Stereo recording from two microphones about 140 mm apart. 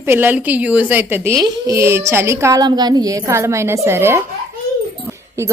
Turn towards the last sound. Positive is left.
turn(degrees=-20)  # may be behind; listen again after turning